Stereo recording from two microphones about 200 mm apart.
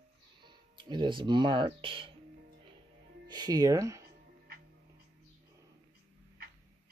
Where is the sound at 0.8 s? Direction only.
25° right (ahead or behind).